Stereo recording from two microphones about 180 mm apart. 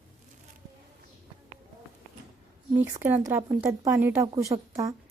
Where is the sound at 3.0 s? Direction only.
15° right (ahead or behind).